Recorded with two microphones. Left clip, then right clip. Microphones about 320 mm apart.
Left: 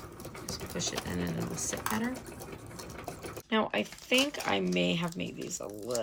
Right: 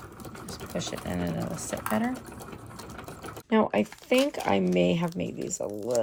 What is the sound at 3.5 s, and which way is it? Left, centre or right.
Speech, centre.